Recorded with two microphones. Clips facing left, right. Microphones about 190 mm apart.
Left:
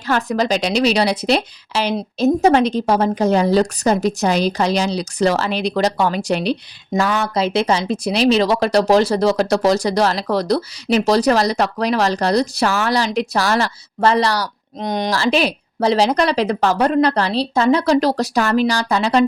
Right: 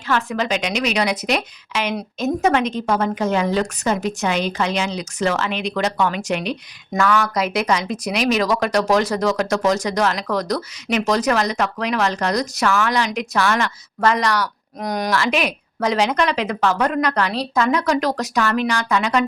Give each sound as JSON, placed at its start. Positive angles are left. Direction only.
{"t": 0.1, "sound": "a woman's voice", "side_deg": 40}